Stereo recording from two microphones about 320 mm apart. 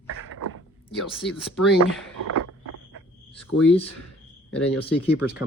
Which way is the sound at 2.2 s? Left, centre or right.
Right.